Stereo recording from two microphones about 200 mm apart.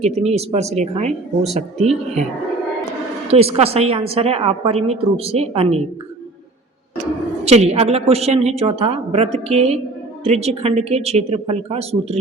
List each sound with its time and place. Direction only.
0.0 s a woman's voice: 30° right (ahead or behind)
3.3 s a woman's voice: 30° right (ahead or behind)
7.4 s a woman's voice: 30° right (ahead or behind)